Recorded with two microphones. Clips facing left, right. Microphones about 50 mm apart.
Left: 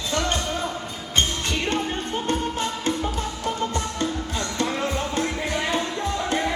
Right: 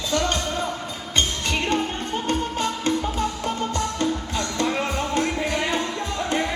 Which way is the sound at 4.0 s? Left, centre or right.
Right.